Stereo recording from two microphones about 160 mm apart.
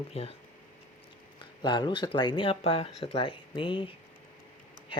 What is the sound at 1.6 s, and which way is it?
Speech, 30° left (ahead or behind).